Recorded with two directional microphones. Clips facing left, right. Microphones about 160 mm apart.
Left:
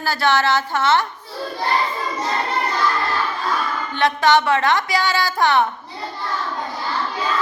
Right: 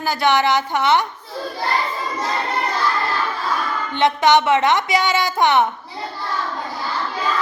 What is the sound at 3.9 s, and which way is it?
Speech, 20° right (ahead or behind).